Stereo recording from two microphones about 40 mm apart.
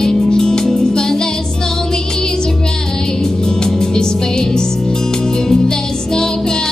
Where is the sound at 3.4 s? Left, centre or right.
Centre.